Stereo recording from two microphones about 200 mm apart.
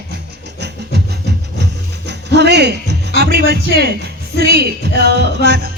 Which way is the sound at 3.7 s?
55° right (ahead or behind).